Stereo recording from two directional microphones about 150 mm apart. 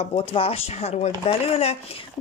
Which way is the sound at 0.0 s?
40° left (ahead or behind).